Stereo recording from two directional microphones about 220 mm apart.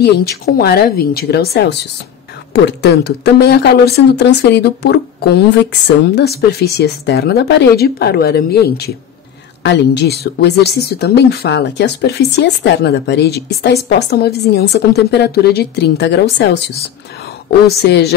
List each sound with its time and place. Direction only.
0.0 s speech: 45° left (ahead or behind)
17.8 s speech: 50° left (ahead or behind)